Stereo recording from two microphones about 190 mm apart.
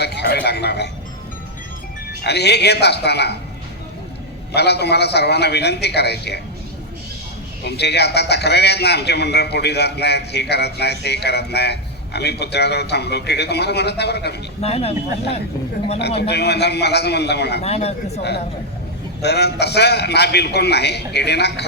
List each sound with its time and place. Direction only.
0.0 s a man's voice: 60° left (ahead or behind)
2.2 s a man's voice: 60° left (ahead or behind)
4.5 s a man's voice: 60° left (ahead or behind)
7.6 s a man's voice: 60° left (ahead or behind)
14.6 s speech: 30° left (ahead or behind)
16.2 s a man's voice: 60° left (ahead or behind)
17.6 s speech: 35° left (ahead or behind)
18.2 s a man's voice: 60° left (ahead or behind)